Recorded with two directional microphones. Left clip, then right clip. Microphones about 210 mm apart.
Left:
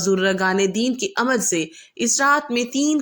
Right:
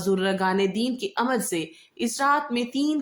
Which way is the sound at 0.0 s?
20° left (ahead or behind).